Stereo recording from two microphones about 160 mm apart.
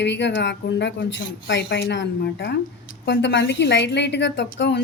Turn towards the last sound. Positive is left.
turn(degrees=90)